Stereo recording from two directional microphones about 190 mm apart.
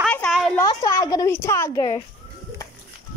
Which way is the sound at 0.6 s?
15° left (ahead or behind).